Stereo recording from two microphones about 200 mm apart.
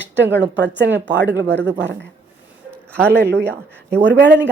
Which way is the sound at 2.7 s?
5° left (ahead or behind).